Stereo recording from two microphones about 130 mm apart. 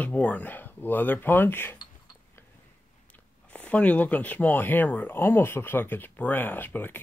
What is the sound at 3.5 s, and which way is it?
Speech, 10° left (ahead or behind).